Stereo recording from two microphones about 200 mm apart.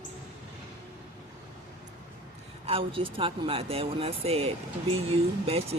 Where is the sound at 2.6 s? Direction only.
30° right (ahead or behind).